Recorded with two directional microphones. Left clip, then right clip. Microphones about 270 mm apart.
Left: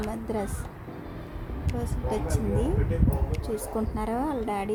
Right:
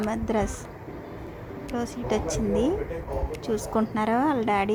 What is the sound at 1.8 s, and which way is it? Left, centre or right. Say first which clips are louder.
Speech: right 4 dB; centre.